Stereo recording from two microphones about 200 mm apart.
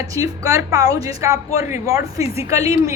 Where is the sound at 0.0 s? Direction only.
15° right (ahead or behind).